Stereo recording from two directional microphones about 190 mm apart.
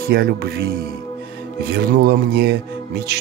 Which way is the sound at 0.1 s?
55° right (ahead or behind).